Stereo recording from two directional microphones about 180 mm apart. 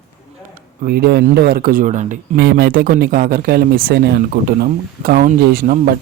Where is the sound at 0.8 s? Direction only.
60° right (ahead or behind); by 2.4 s 45° right (ahead or behind).